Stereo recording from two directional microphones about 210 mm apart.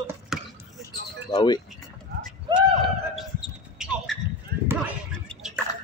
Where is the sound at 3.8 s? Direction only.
5° right (ahead or behind).